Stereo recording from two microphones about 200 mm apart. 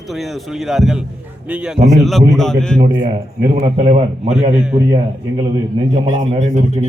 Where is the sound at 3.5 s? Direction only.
30° right (ahead or behind).